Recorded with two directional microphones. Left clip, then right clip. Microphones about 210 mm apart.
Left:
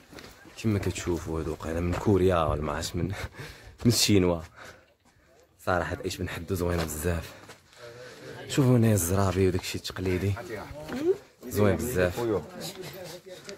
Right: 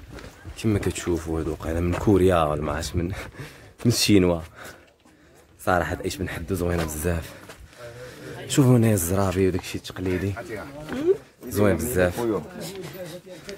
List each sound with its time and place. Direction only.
0.6 s speech: centre (ahead or behind)
5.7 s speech: centre (ahead or behind)
8.5 s speech: centre (ahead or behind); by 11.0 s 15° left (ahead or behind)
11.5 s speech: centre (ahead or behind)
12.2 s speech: 35° left (ahead or behind)